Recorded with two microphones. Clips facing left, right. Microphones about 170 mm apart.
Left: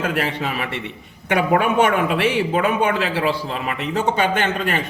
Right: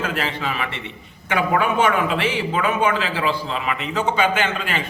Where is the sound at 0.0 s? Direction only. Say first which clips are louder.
Left 2 dB; 50° left (ahead or behind).